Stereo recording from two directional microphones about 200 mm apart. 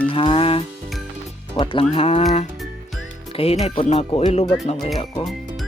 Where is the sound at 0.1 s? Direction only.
25° left (ahead or behind).